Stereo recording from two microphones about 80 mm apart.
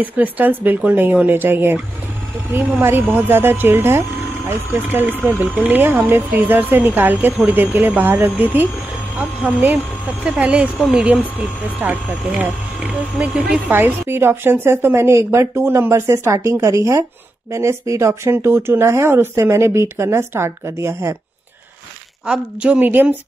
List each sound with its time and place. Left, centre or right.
0.0 s speech: right
13.7 s speech: right
22.2 s speech: centre